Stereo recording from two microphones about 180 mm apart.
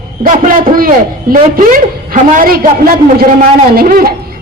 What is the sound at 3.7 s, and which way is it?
Speech, 50° right (ahead or behind).